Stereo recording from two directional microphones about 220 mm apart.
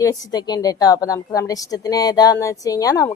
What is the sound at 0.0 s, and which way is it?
A woman's voice, 15° left (ahead or behind).